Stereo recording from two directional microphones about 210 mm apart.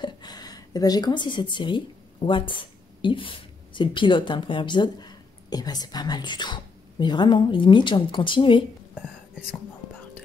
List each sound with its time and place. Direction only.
0.0 s a sound: 20° left (ahead or behind)
2.2 s speech: 25° left (ahead or behind)
8.9 s whispering: 5° right (ahead or behind)